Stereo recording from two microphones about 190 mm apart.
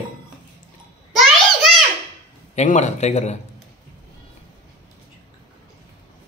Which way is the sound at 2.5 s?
35° left (ahead or behind).